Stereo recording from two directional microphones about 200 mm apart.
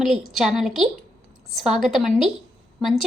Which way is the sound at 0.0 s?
Centre (ahead or behind).